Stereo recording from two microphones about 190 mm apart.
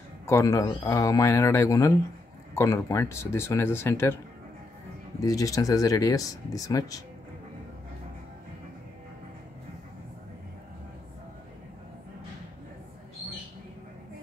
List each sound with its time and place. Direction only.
0.3 s speech: 15° left (ahead or behind)
5.2 s speech: 20° left (ahead or behind)